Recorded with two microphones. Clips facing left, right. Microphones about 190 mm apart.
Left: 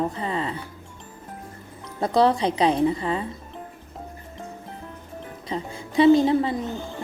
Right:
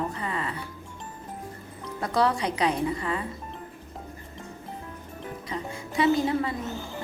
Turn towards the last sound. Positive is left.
turn(degrees=30)  # may be behind; listen again after turning